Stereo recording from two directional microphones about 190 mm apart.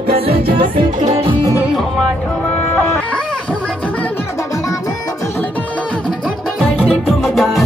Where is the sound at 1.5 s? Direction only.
Centre (ahead or behind).